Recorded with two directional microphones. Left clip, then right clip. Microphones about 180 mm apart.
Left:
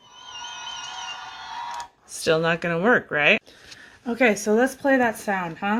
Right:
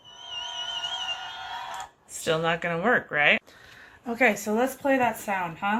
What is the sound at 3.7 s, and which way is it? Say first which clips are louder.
Speech: left 5 dB; 50° left (ahead or behind).